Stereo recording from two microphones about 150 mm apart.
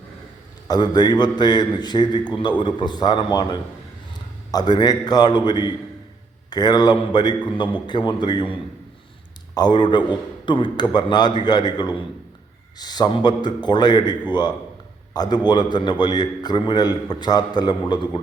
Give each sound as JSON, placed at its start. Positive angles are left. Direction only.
{"t": 0.7, "sound": "a man's voice", "side_deg": 30}
{"t": 9.6, "sound": "a man's voice", "side_deg": 30}